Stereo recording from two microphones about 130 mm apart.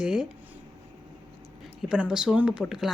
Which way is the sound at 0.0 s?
5° right (ahead or behind).